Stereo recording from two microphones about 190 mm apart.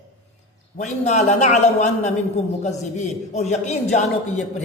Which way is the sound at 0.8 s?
40° left (ahead or behind).